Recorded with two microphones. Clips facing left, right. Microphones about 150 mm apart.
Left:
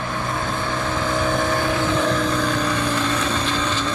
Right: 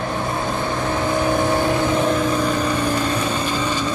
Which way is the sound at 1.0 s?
15° right (ahead or behind).